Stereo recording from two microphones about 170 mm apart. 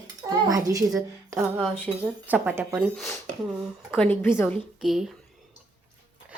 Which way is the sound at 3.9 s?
10° left (ahead or behind).